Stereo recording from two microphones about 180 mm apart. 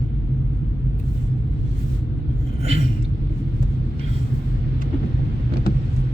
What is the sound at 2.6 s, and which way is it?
Speech, 35° right (ahead or behind).